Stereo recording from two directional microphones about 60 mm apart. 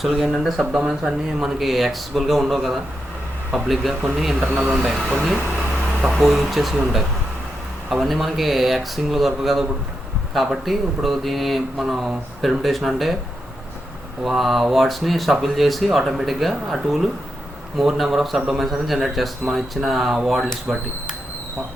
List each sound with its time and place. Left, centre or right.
0.0 s a man's voice: centre
5.2 s a sound: centre
6.1 s a man's voice: centre
14.3 s a man's voice: centre